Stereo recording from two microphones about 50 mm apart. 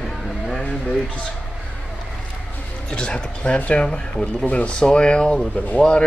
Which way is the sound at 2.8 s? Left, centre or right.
Centre.